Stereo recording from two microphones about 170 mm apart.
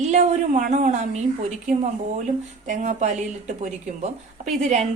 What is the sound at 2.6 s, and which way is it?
A woman's voice, 50° right (ahead or behind).